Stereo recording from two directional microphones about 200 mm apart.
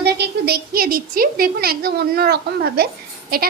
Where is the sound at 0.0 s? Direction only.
55° right (ahead or behind).